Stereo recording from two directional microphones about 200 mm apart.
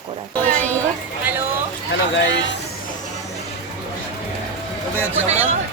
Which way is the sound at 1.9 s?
65° left (ahead or behind).